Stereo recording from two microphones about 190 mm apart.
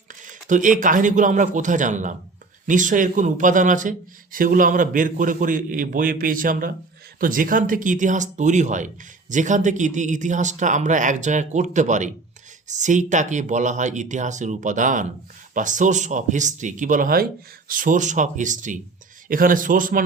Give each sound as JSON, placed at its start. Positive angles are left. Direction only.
{"t": 0.1, "sound": "speech", "side_deg": -45}